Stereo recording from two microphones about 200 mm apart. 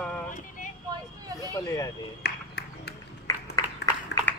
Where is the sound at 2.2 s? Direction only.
55° left (ahead or behind).